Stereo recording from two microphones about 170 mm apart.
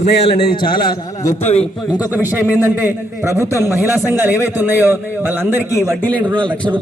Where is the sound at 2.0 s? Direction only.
10° right (ahead or behind).